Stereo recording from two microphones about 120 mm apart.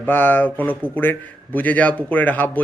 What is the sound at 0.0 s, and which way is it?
A man's voice, 15° left (ahead or behind).